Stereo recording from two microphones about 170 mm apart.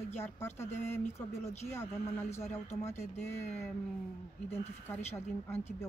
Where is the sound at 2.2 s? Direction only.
40° left (ahead or behind).